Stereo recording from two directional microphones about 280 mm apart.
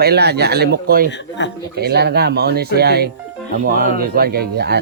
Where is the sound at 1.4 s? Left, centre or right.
Left.